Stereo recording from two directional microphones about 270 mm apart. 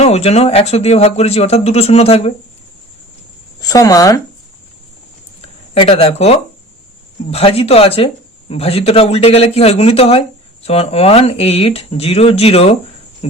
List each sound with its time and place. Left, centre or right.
0.0 s speech: left
3.6 s speech: centre
5.4 s speech: centre